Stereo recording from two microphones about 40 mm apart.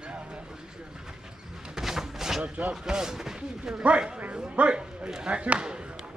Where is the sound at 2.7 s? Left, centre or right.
Centre.